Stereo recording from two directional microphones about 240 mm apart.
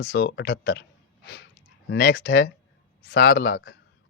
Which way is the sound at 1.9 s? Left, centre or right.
Left.